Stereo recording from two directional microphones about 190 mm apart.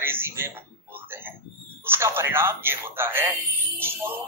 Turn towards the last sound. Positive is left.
turn(degrees=-10)  # may be behind; listen again after turning